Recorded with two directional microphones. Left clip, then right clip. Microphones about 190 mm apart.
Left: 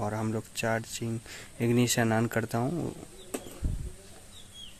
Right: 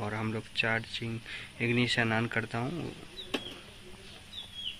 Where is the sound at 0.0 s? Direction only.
30° left (ahead or behind).